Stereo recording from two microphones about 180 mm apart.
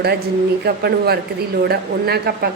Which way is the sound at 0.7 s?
60° right (ahead or behind).